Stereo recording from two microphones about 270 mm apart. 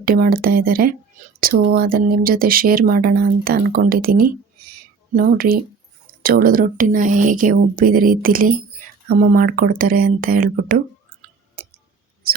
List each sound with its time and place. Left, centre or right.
0.0 s speech: right